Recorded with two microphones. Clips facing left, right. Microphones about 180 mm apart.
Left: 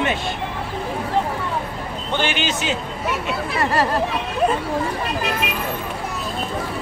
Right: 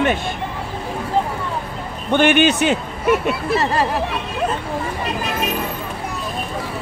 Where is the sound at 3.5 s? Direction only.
15° right (ahead or behind).